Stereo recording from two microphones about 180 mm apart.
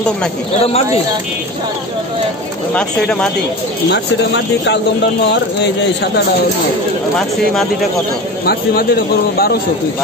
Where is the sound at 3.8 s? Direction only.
75° left (ahead or behind).